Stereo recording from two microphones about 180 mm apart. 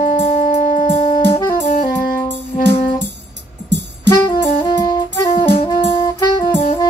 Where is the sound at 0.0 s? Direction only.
40° left (ahead or behind).